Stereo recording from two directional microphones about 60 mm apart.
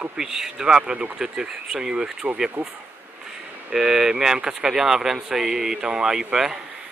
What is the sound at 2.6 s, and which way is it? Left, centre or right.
Speech, right.